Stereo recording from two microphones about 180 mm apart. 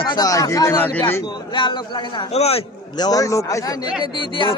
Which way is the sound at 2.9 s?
20° left (ahead or behind).